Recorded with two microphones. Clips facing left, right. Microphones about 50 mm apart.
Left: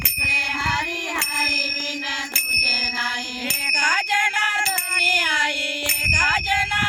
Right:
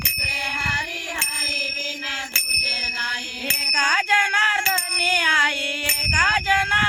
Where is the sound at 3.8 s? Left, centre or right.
Right.